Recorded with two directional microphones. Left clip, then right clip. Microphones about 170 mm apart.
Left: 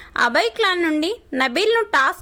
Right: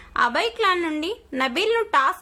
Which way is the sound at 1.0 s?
30° left (ahead or behind).